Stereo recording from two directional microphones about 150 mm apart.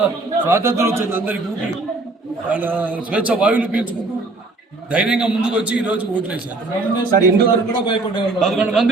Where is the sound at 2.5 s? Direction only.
10° right (ahead or behind).